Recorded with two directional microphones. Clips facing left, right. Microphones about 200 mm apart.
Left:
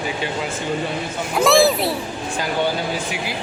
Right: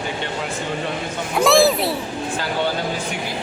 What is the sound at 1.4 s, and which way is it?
Speech, centre (ahead or behind).